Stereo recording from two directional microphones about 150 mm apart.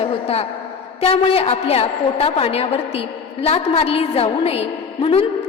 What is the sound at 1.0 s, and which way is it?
A woman's voice, 40° left (ahead or behind).